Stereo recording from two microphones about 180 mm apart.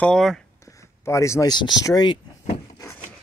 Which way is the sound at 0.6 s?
15° left (ahead or behind).